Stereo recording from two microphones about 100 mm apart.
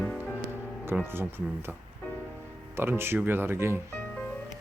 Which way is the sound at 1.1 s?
25° right (ahead or behind).